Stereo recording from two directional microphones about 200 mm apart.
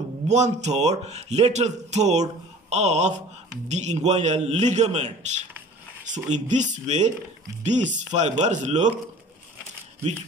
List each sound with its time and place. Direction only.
0.3 s a man's voice: 35° right (ahead or behind)